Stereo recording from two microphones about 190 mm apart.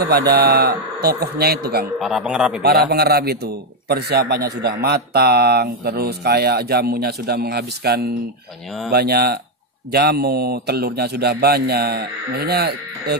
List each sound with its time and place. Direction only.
0.0 s a man's voice: 55° right (ahead or behind)
2.0 s a man's voice: centre (ahead or behind)
2.6 s a man's voice: 55° right (ahead or behind)